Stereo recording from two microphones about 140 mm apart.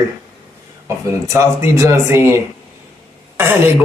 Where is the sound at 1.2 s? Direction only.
20° right (ahead or behind).